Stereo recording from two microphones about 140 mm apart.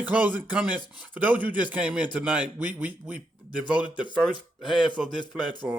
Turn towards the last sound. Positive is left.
turn(degrees=-5)  # may be behind; listen again after turning